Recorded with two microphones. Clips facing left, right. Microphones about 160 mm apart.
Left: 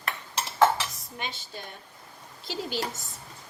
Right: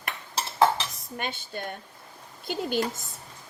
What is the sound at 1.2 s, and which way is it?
Speech, 55° right (ahead or behind).